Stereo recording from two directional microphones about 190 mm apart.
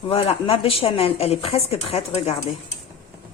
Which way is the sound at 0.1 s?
30° left (ahead or behind).